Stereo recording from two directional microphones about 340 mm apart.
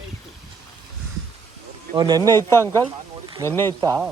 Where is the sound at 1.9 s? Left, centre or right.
Centre.